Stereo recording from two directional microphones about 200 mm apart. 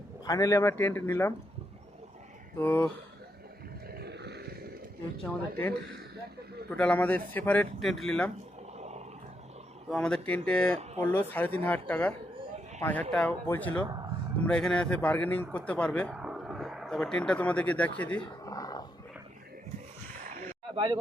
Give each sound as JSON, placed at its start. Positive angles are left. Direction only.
{"t": 0.3, "sound": "speech", "side_deg": 15}
{"t": 2.6, "sound": "speech", "side_deg": 10}
{"t": 3.8, "sound": "a sound", "side_deg": -50}
{"t": 6.7, "sound": "speech", "side_deg": 5}
{"t": 8.8, "sound": "a sound", "side_deg": -35}
{"t": 9.9, "sound": "speech", "side_deg": 5}
{"t": 18.2, "sound": "dog", "side_deg": 20}
{"t": 20.2, "sound": "a sound", "side_deg": -45}
{"t": 20.7, "sound": "speech", "side_deg": -25}